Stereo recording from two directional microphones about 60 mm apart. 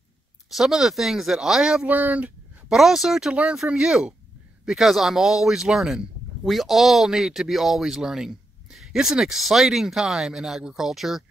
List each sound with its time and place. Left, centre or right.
0.5 s speech: centre
1.9 s speech: right
2.7 s speech: centre